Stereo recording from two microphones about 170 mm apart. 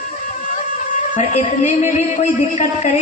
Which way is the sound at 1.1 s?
45° left (ahead or behind).